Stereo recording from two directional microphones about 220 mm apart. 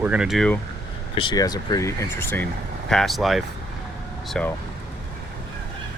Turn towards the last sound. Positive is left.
turn(degrees=5)  # may be behind; listen again after turning